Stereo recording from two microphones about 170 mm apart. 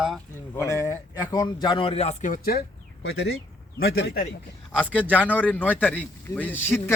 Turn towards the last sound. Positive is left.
turn(degrees=10)  # may be behind; listen again after turning